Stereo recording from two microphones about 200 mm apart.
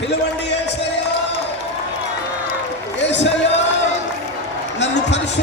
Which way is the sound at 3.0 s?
60° left (ahead or behind).